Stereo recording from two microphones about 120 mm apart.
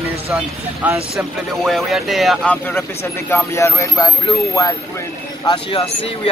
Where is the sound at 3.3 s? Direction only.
25° left (ahead or behind).